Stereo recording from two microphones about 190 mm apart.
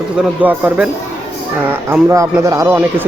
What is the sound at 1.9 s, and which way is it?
Speech, 15° right (ahead or behind).